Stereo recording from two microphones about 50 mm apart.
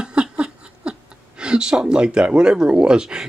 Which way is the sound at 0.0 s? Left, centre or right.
Centre.